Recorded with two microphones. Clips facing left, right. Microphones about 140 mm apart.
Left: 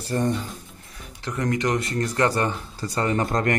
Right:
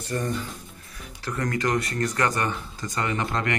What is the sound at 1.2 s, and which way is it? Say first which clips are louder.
Speech: left 2 dB; 20° left (ahead or behind).